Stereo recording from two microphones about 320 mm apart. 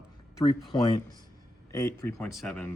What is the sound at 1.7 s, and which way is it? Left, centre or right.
Speech, centre.